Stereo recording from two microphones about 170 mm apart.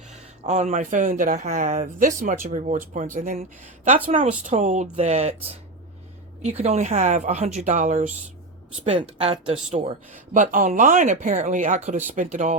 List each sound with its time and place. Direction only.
0.1 s speech: 40° right (ahead or behind)
6.4 s speech: 35° right (ahead or behind)
9.7 s speech: 45° right (ahead or behind)